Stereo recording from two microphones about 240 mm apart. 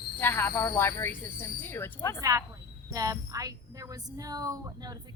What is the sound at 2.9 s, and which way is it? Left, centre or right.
Speech, centre.